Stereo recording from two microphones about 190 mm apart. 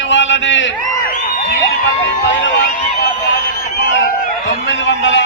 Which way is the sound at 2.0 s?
75° left (ahead or behind).